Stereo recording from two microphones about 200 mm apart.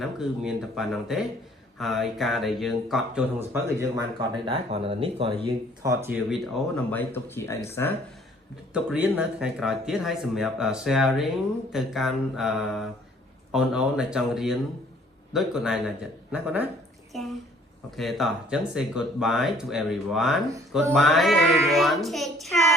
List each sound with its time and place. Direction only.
0.0 s speech: centre (ahead or behind)
4.4 s speech: 30° right (ahead or behind)
5.8 s speech: 15° right (ahead or behind); by 7.9 s 15° left (ahead or behind)
8.7 s speech: 5° right (ahead or behind)
17.1 s a sound: centre (ahead or behind)
17.9 s speech: centre (ahead or behind)